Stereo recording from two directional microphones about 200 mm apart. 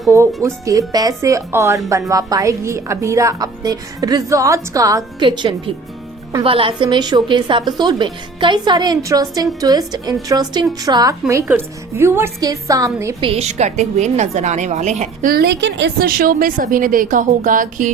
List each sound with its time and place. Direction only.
0.1 s a woman's voice: 15° right (ahead or behind)
13.2 s a woman's voice: 30° right (ahead or behind)